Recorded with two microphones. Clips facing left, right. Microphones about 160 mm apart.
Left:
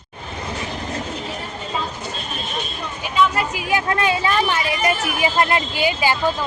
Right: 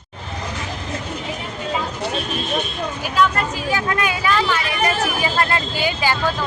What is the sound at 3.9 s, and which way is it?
Speech, 30° left (ahead or behind).